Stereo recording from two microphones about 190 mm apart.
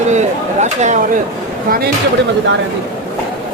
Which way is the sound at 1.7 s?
55° right (ahead or behind).